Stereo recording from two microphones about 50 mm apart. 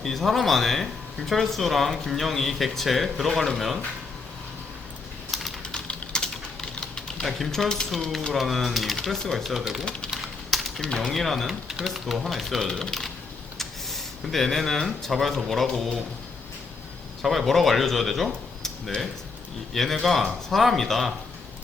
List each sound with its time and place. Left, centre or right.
0.0 s speech: centre
5.3 s typing: centre
5.6 s typing: centre
7.3 s speech: centre
10.1 s typing: centre
10.8 s speech: centre
17.2 s speech: centre
19.7 s speech: centre